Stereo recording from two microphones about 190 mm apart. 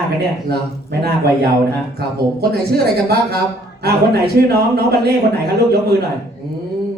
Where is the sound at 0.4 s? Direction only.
55° right (ahead or behind).